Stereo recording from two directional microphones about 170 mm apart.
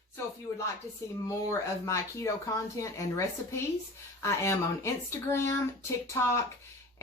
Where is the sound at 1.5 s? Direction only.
15° left (ahead or behind).